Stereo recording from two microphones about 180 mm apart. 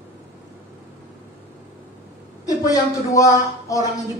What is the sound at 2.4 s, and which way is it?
A woman's voice, 20° left (ahead or behind).